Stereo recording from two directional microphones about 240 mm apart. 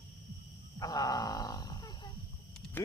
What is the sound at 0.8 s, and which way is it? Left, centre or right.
Roaring cats, centre.